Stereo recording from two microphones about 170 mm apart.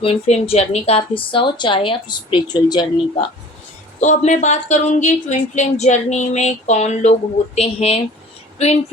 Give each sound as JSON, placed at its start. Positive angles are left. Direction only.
{"t": 0.0, "sound": "a woman's voice", "side_deg": 35}
{"t": 4.0, "sound": "speech", "side_deg": 45}